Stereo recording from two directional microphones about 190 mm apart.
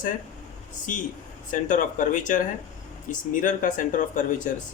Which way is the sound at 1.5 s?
45° left (ahead or behind).